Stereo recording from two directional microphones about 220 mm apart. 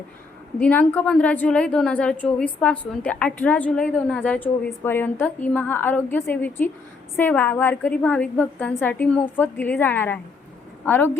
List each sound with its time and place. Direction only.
0.6 s a woman's voice: 5° left (ahead or behind)